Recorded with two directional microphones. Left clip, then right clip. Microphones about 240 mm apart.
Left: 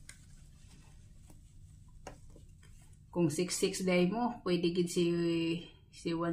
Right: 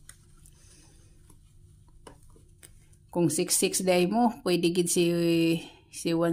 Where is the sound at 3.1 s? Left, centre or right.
Right.